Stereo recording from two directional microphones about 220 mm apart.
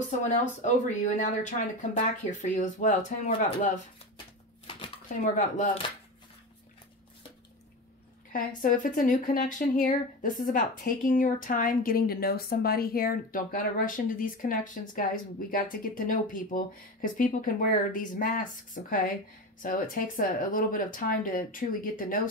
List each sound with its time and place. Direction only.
0.2 s speech: 35° left (ahead or behind)
4.6 s speech: 25° left (ahead or behind)
8.3 s speech: 40° left (ahead or behind)